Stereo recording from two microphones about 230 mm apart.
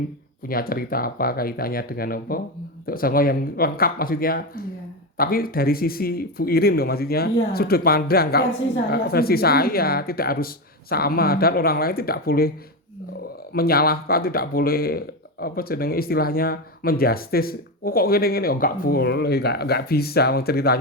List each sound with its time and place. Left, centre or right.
0.4 s speech: left
13.5 s speech: left